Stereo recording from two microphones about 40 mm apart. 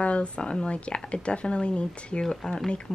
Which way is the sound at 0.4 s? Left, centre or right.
Left.